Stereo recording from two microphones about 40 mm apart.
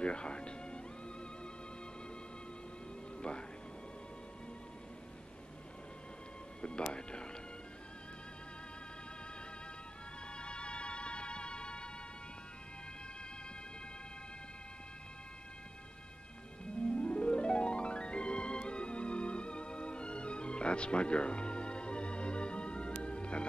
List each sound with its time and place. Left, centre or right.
0.0 s music: left
3.2 s music: left
6.6 s music: left
10.3 s music: left
16.6 s music: left